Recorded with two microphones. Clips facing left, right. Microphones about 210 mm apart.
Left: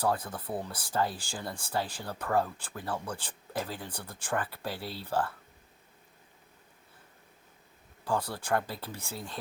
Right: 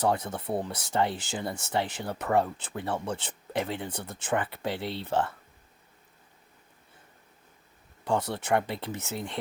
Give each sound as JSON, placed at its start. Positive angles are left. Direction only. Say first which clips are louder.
{"t": 0.0, "sound": "speech", "louder": "right 3 dB", "side_deg": -25}
{"t": 8.0, "sound": "speech", "louder": "right 4 dB", "side_deg": -25}